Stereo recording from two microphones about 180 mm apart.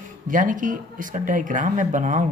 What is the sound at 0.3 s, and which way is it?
Speech, 45° right (ahead or behind).